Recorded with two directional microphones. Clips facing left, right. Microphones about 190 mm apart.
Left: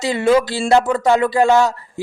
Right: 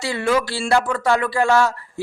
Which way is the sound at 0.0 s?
20° left (ahead or behind).